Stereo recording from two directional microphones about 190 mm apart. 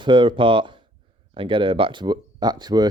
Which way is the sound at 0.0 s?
25° right (ahead or behind).